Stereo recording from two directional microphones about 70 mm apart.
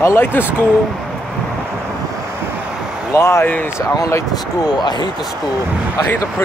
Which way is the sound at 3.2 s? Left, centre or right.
Left.